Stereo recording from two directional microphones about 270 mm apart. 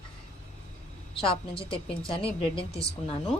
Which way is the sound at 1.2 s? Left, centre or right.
Centre.